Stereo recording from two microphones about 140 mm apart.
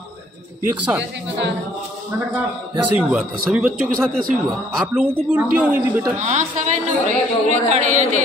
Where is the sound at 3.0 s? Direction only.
10° right (ahead or behind).